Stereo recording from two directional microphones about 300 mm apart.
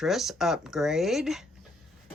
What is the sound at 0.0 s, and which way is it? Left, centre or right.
Speech, centre.